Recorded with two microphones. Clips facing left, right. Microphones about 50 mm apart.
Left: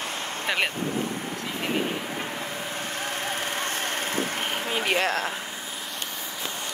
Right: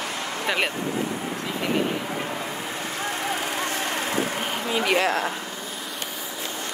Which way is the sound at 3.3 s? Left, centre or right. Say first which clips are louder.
Right 2 dB; left.